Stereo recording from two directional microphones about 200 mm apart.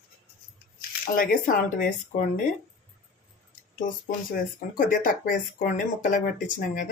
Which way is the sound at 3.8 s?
40° left (ahead or behind).